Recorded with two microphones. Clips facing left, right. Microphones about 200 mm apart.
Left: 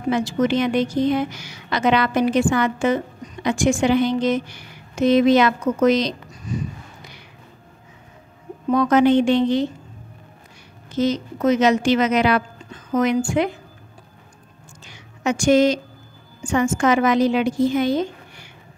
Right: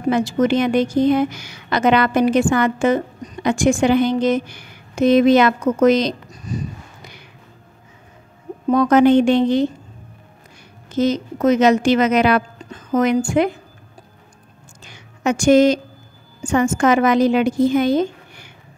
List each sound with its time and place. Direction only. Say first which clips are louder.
0.1 s a woman's voice: right 3 dB; 50° right (ahead or behind)
8.7 s a woman's voice: right 3 dB; 50° right (ahead or behind)
11.0 s a woman's voice: right 3 dB; 50° right (ahead or behind)
15.2 s a woman's voice: right 3 dB; 50° right (ahead or behind)